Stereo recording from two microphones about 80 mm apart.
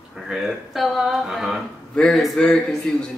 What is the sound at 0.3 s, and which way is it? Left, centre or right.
A man's voice, centre.